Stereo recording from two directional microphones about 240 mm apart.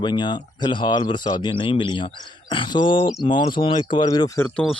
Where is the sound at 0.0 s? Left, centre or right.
Centre.